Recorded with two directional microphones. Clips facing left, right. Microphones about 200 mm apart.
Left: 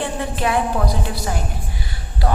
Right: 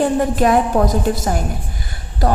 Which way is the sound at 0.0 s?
45° right (ahead or behind).